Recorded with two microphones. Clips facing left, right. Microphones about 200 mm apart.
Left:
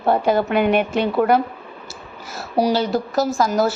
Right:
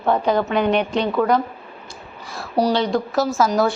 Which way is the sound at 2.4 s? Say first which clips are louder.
Even; 5° left (ahead or behind).